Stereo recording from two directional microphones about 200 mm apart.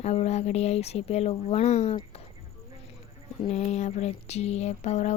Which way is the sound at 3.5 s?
35° left (ahead or behind).